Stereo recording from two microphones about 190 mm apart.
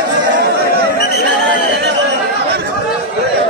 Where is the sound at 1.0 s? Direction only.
55° left (ahead or behind).